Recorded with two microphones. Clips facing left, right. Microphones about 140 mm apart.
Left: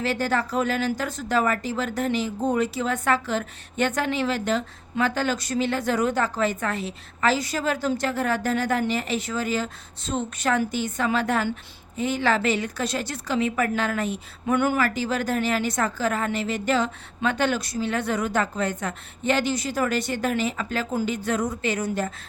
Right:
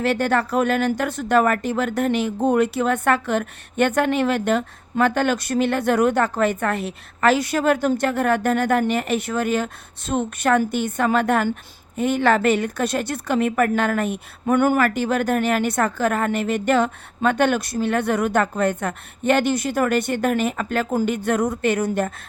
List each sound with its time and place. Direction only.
0.0 s speech: 60° right (ahead or behind)